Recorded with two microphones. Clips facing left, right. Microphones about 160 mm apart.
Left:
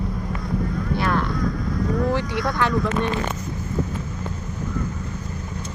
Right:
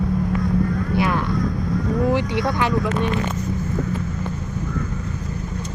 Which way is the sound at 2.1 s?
20° right (ahead or behind).